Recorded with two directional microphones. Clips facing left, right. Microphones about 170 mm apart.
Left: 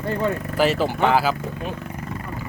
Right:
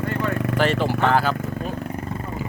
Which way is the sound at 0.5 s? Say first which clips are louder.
Left 2 dB; 5° left (ahead or behind).